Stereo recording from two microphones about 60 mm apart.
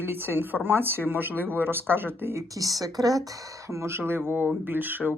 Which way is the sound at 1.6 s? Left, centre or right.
Right.